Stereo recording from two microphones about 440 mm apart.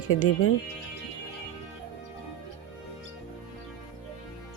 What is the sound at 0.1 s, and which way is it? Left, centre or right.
Speech, left.